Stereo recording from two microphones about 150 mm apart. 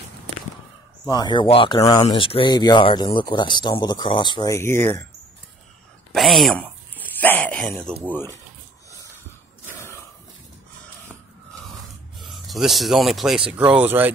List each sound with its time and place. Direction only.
1.0 s speech: 30° left (ahead or behind)
4.6 s speech: 15° left (ahead or behind)
6.1 s speech: centre (ahead or behind)
7.0 s speech: 10° left (ahead or behind)
12.2 s speech: centre (ahead or behind)